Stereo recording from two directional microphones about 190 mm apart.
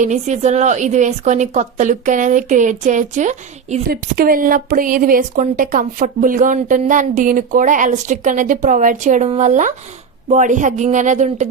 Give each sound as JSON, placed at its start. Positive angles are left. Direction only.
{"t": 0.0, "sound": "a woman's voice", "side_deg": -35}